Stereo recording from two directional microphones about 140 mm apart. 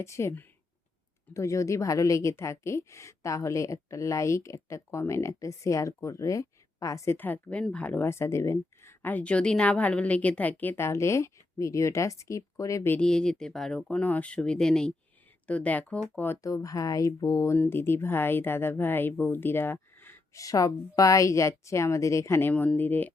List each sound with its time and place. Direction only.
0.0 s a woman's voice: 20° left (ahead or behind)
13.0 s a woman's voice: 5° left (ahead or behind)